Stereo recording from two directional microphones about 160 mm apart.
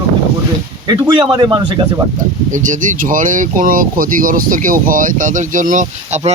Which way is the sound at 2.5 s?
50° right (ahead or behind).